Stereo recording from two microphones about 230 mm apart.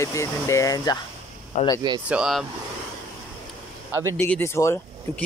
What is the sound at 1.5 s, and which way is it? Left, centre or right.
Speech, left.